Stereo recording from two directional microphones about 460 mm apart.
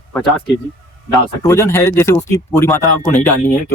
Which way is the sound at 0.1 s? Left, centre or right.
Centre.